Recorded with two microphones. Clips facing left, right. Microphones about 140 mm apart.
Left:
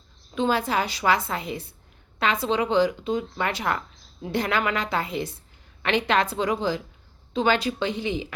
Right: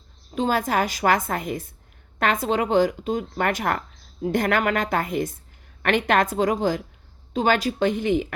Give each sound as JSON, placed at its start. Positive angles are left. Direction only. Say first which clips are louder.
{"t": 0.3, "sound": "speech", "louder": "right 1 dB", "side_deg": -45}